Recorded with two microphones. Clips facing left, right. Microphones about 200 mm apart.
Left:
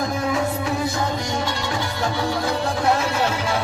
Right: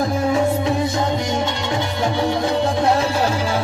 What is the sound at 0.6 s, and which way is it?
Music, 20° right (ahead or behind).